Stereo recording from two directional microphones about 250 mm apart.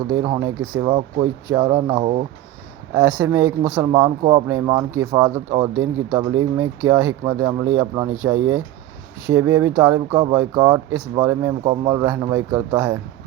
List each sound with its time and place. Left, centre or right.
0.1 s speech: centre